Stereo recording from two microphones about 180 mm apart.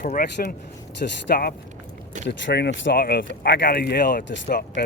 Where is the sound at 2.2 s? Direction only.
70° left (ahead or behind); by 4.9 s 50° left (ahead or behind).